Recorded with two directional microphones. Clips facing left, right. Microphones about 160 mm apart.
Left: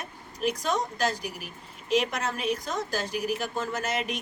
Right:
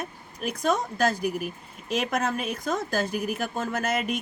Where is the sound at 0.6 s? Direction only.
55° right (ahead or behind).